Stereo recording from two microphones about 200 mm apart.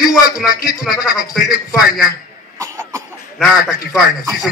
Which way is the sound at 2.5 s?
15° right (ahead or behind).